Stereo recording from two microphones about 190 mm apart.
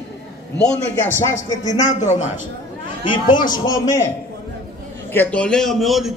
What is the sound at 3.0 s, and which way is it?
A man's voice, 25° left (ahead or behind).